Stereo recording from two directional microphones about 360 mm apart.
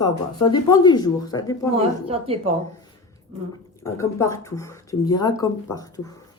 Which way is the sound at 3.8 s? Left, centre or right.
Centre.